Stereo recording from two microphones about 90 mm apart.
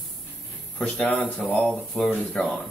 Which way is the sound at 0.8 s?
15° left (ahead or behind).